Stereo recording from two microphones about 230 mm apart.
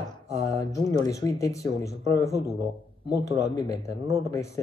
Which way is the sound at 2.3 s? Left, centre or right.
Left.